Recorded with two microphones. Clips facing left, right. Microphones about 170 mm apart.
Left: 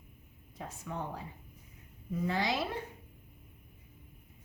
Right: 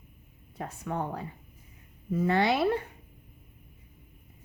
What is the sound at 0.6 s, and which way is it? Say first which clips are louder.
Speech: right 6 dB; 60° right (ahead or behind).